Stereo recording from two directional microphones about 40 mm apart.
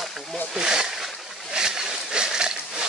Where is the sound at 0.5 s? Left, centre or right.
Centre.